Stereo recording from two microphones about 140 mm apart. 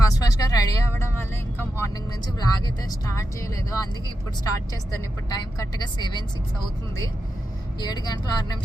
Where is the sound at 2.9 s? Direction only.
25° left (ahead or behind).